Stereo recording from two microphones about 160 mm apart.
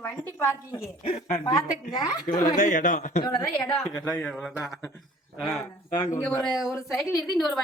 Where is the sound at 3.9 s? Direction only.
10° left (ahead or behind).